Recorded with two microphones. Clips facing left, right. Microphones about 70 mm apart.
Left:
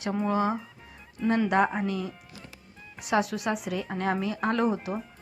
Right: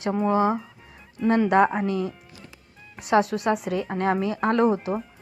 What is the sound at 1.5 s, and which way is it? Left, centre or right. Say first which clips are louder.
Speech: right 6 dB; right.